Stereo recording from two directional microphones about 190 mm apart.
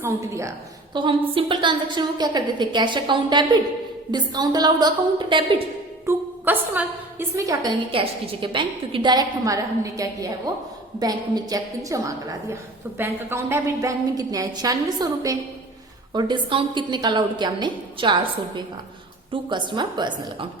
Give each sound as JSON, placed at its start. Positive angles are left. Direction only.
{"t": 0.0, "sound": "a woman's voice", "side_deg": -15}
{"t": 6.1, "sound": "a woman's voice", "side_deg": -10}